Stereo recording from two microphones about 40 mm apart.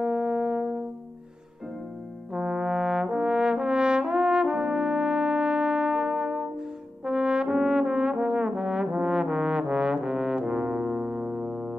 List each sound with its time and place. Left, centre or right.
0.0 s music: right
2.3 s brass instrument: centre